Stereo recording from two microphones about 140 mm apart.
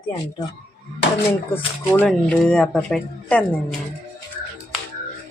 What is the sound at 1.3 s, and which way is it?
Speech, 15° left (ahead or behind).